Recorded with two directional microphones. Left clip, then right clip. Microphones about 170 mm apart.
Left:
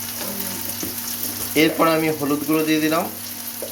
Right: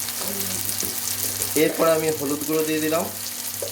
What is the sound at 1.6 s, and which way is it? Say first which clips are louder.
Speech: left 2 dB; centre (ahead or behind).